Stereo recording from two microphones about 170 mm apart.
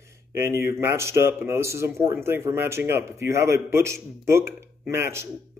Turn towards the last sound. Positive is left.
turn(degrees=-15)  # may be behind; listen again after turning